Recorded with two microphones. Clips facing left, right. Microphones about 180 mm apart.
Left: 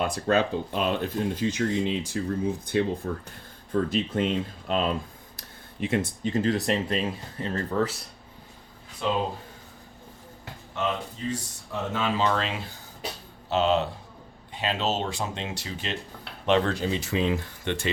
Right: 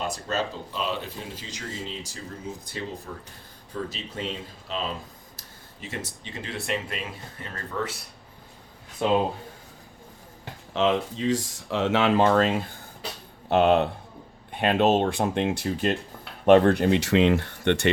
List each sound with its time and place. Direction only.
0.0 s speech: 60° left (ahead or behind); by 7.9 s 30° left (ahead or behind)
9.0 s speech: 55° right (ahead or behind)
10.8 s speech: 90° right; by 17.9 s 65° right (ahead or behind)